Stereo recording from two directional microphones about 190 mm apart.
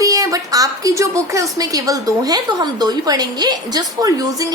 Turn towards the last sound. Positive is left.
turn(degrees=-20)  # may be behind; listen again after turning